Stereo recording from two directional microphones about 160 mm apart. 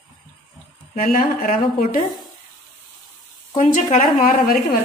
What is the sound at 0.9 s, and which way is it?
A woman's voice, 55° left (ahead or behind).